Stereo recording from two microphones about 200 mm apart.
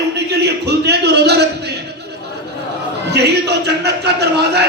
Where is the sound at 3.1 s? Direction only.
55° right (ahead or behind).